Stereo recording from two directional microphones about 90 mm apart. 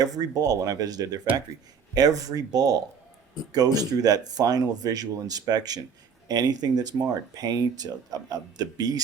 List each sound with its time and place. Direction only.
0.0 s speech: 45° right (ahead or behind)